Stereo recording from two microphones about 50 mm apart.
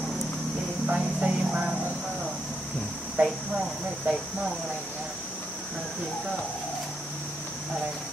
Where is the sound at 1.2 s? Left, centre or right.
Right.